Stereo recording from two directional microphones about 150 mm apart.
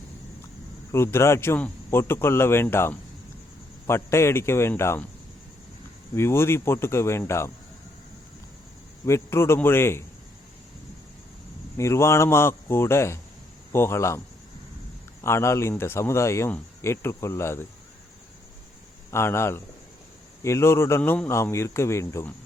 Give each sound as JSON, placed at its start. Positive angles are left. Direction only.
{"t": 0.9, "sound": "speech", "side_deg": 15}
{"t": 6.1, "sound": "speech", "side_deg": 15}
{"t": 9.0, "sound": "speech", "side_deg": 15}
{"t": 11.8, "sound": "speech", "side_deg": 20}
{"t": 15.2, "sound": "speech", "side_deg": 15}
{"t": 19.1, "sound": "speech", "side_deg": 15}